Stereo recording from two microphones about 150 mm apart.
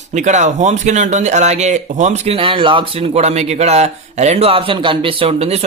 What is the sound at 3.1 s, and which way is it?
A man's voice, 45° right (ahead or behind).